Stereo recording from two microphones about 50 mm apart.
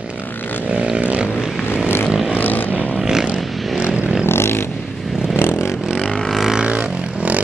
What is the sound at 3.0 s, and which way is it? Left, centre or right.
Vehicle, centre.